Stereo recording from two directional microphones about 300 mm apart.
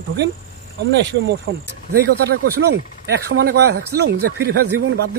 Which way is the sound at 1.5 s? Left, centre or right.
Right.